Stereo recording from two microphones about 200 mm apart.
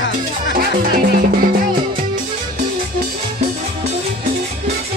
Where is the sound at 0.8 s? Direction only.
45° right (ahead or behind).